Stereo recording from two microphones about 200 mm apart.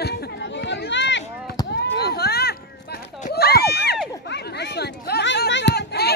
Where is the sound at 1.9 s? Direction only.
50° left (ahead or behind).